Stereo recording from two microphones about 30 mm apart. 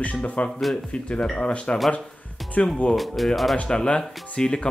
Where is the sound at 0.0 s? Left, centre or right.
Left.